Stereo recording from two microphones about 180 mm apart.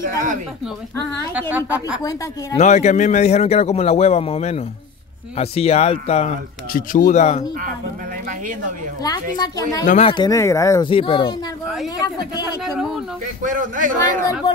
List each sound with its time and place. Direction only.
0.0 s a man's voice: 50° right (ahead or behind)
1.3 s a woman's voice: 10° right (ahead or behind)
2.6 s a man's voice: 40° left (ahead or behind)
6.7 s speech: 50° left (ahead or behind)
9.0 s a woman's voice: 20° left (ahead or behind)
9.8 s a man's voice: 35° left (ahead or behind)
10.1 s speech: 20° left (ahead or behind)
10.9 s a woman's voice: 30° left (ahead or behind)
11.6 s a woman's voice: centre (ahead or behind)
13.4 s a man's voice: 45° right (ahead or behind)